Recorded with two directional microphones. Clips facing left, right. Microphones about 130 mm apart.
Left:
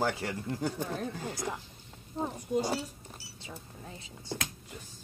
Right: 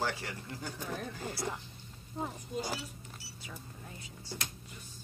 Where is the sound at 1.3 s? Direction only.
15° left (ahead or behind).